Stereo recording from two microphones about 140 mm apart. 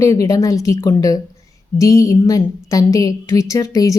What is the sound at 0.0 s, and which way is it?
A woman's voice, 20° left (ahead or behind).